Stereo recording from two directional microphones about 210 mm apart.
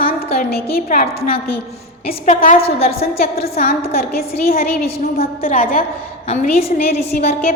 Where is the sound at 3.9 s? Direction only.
45° left (ahead or behind).